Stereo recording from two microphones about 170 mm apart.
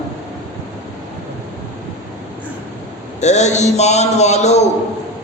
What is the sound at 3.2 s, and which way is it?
A man's voice, 40° left (ahead or behind).